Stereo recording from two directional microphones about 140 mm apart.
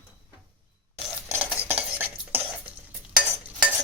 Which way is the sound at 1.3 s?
10° right (ahead or behind).